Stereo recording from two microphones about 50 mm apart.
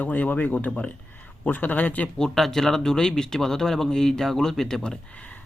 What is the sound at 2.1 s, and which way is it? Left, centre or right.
Speech, centre.